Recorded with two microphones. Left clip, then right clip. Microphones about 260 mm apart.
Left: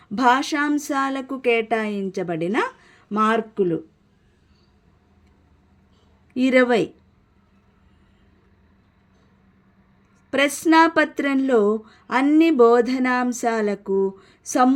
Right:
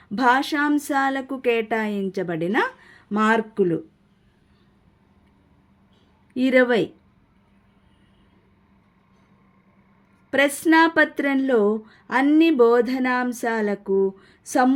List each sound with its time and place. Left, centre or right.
0.1 s speech: centre
6.3 s speech: centre
10.3 s speech: centre